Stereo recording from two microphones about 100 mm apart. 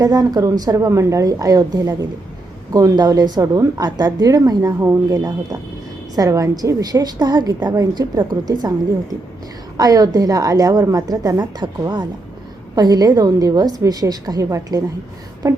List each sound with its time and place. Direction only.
0.0 s a woman's voice: 40° right (ahead or behind)
9.7 s a woman's voice: 40° right (ahead or behind)